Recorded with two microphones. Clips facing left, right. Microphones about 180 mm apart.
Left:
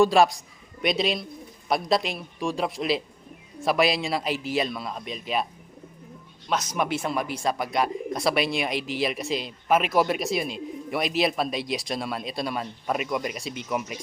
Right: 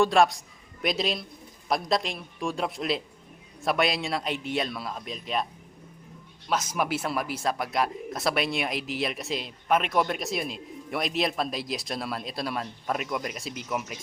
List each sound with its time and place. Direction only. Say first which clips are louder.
0.0 s a man's voice: left 2 dB; centre (ahead or behind)
6.5 s speech: left 1 dB; 5° right (ahead or behind)